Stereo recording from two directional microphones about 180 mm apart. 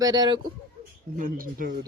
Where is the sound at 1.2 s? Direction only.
50° right (ahead or behind).